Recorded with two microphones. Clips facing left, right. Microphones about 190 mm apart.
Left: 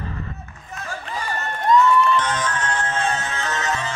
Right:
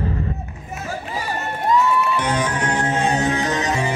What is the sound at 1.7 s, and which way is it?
Music, 5° right (ahead or behind).